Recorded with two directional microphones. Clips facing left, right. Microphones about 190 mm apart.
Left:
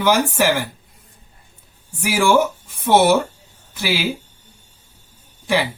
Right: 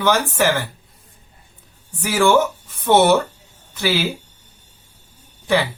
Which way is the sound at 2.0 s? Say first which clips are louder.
Even; 10° left (ahead or behind).